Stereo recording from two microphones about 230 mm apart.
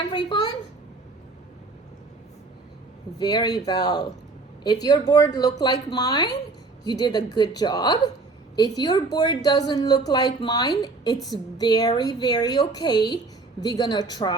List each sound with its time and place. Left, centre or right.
0.0 s speech: left
3.2 s a woman's voice: centre